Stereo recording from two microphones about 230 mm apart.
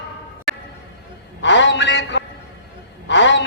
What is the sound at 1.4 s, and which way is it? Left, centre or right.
A man's voice, left.